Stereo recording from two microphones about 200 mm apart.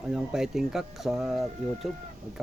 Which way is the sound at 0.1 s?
5° right (ahead or behind).